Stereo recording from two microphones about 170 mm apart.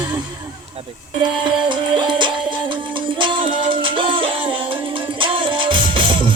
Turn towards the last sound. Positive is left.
turn(degrees=-30)  # may be behind; listen again after turning